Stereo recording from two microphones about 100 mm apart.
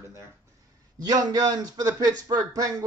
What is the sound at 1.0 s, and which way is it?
Speech, 40° right (ahead or behind).